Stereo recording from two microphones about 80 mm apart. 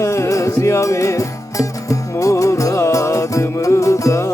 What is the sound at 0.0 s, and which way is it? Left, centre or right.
Music, left.